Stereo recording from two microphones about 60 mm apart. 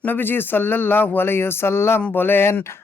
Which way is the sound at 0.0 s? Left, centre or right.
Left.